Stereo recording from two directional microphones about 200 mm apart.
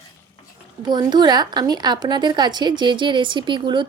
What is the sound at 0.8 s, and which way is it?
A woman's voice, 20° right (ahead or behind).